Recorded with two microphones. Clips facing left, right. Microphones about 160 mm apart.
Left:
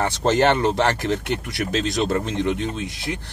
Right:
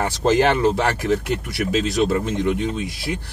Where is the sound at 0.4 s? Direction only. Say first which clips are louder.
Left 1 dB; 5° right (ahead or behind).